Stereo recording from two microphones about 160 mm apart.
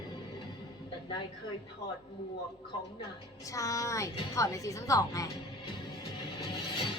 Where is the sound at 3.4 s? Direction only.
20° left (ahead or behind).